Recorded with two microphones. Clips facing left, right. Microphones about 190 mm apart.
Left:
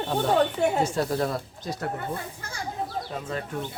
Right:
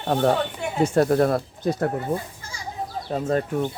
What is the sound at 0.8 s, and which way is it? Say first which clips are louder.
Speech: right 7 dB; 55° right (ahead or behind).